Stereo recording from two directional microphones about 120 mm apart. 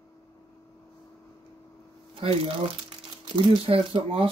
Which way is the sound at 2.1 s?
50° right (ahead or behind).